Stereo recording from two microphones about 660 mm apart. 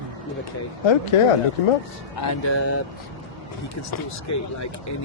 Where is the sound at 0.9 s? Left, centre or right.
Left.